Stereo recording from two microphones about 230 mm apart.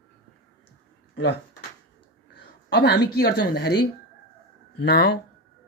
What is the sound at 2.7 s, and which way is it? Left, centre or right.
Speech, left.